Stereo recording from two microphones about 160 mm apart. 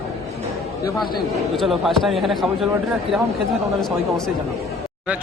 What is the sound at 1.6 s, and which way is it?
Speech, centre (ahead or behind).